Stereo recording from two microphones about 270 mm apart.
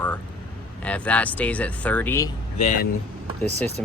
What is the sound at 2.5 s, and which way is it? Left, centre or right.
Speech, left.